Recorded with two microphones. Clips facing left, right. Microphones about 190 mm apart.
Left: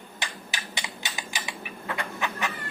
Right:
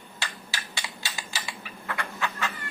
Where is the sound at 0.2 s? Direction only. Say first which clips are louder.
Left 1 dB; 20° left (ahead or behind).